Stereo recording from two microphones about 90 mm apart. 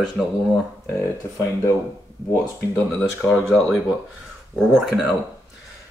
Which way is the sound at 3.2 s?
15° left (ahead or behind).